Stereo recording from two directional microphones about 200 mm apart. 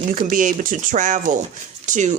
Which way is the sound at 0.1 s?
40° right (ahead or behind).